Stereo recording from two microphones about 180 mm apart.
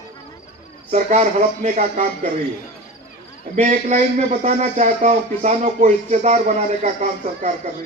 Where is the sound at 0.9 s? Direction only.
40° right (ahead or behind).